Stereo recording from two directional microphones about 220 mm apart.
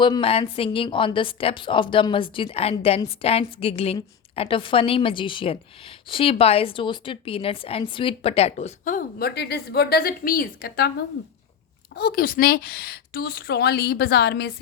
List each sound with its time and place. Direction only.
0.0 s a woman's voice: 25° left (ahead or behind); by 10.9 s 40° left (ahead or behind)
11.9 s a woman's voice: 45° left (ahead or behind)